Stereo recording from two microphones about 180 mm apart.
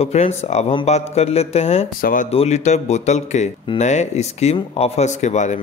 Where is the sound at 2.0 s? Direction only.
50° left (ahead or behind).